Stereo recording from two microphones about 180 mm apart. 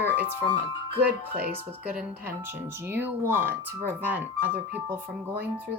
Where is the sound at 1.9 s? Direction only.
10° right (ahead or behind).